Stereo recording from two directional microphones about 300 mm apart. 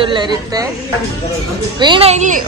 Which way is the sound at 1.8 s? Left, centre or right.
Centre.